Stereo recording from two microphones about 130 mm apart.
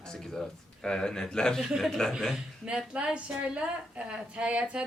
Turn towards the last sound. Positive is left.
turn(degrees=-10)  # may be behind; listen again after turning